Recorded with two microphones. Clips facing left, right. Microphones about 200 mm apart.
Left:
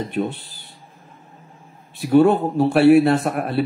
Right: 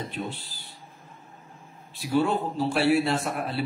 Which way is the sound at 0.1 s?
60° left (ahead or behind).